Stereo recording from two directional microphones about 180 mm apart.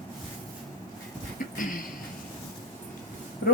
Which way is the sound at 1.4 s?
50° left (ahead or behind).